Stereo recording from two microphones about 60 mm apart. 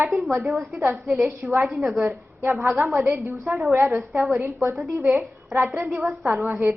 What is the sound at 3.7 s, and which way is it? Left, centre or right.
A woman's voice, right.